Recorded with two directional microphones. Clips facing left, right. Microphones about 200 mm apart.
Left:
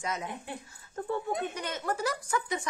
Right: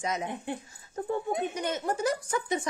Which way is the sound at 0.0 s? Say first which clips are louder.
Right 4 dB; 20° right (ahead or behind).